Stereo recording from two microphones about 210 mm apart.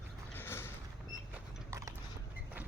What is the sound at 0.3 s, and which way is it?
Mechanisms, 10° left (ahead or behind).